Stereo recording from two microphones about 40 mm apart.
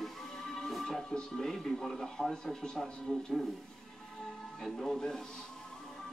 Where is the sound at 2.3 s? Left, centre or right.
Centre.